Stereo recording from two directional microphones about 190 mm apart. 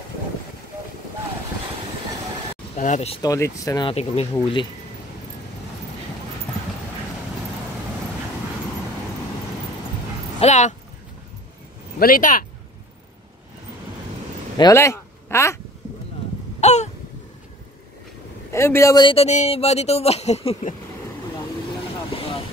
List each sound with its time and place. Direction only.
2.7 s speech: 40° left (ahead or behind)
3.2 s speech: 15° left (ahead or behind)
3.9 s speech: 35° left (ahead or behind)
10.4 s speech: 40° left (ahead or behind)
12.0 s speech: 45° left (ahead or behind)
14.6 s speech: 15° left (ahead or behind)
16.6 s a sound: 35° left (ahead or behind)
18.5 s speech: 15° left (ahead or behind); by 20.7 s 35° left (ahead or behind)
22.1 s vehicle: 30° left (ahead or behind)